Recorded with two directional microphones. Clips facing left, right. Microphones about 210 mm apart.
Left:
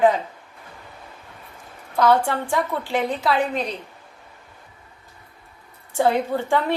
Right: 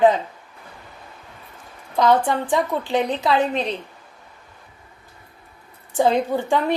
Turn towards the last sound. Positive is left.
turn(degrees=-15)  # may be behind; listen again after turning